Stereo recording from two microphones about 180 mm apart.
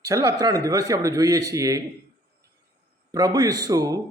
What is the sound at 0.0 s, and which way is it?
Speech, 20° right (ahead or behind).